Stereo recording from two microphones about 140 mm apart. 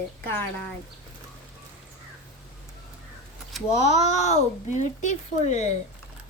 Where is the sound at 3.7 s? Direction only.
55° left (ahead or behind).